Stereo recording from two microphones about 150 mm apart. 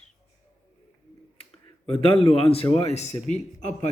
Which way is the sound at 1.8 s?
40° left (ahead or behind).